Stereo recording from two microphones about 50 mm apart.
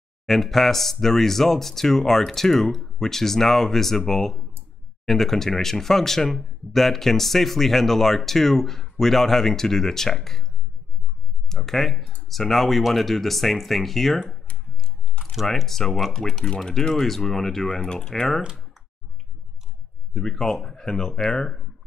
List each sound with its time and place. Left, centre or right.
0.3 s speech: centre
11.4 s speech: centre
15.4 s speech: centre
20.1 s speech: centre